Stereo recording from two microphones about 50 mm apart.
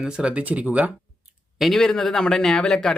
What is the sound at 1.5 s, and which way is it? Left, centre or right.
Speech, centre.